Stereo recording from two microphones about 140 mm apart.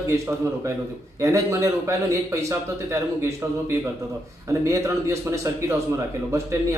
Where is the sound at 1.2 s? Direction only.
20° right (ahead or behind).